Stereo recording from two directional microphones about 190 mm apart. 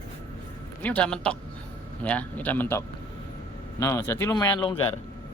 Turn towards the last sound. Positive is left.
turn(degrees=20)  # may be behind; listen again after turning